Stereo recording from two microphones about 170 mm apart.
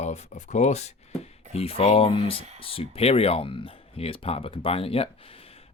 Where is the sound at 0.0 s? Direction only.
40° left (ahead or behind).